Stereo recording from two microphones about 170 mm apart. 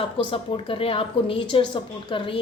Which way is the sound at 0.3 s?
30° left (ahead or behind).